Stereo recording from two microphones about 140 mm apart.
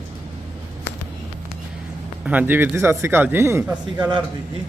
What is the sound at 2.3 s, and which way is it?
Speech, 10° right (ahead or behind).